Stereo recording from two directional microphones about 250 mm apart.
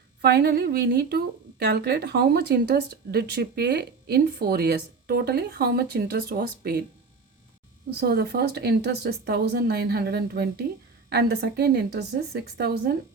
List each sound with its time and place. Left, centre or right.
0.2 s a woman's voice: right
7.9 s a woman's voice: right